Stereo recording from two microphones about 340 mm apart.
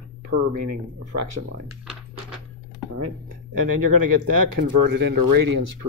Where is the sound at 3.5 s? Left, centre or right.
Right.